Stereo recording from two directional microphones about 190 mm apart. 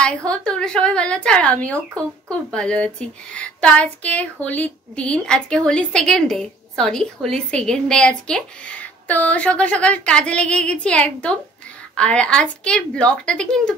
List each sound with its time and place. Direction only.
0.0 s speech: 5° left (ahead or behind)